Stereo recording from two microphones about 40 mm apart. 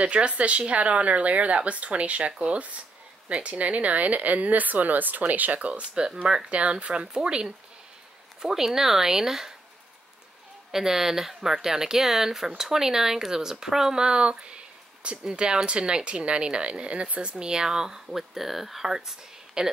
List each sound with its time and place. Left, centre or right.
0.0 s speech: right
6.2 s speech: centre
10.7 s speech: centre